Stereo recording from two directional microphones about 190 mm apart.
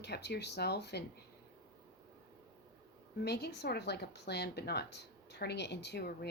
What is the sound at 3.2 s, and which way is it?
A woman's voice, 60° left (ahead or behind).